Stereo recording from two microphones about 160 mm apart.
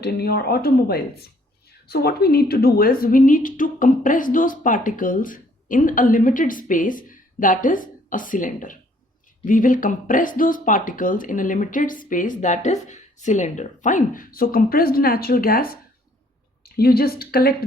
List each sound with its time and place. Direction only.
0.0 s a woman's voice: 75° left (ahead or behind)